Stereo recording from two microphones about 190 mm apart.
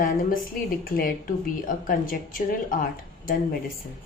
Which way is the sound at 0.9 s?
45° left (ahead or behind).